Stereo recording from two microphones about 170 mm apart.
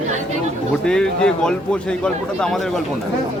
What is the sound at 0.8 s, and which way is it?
A man's voice, 5° left (ahead or behind).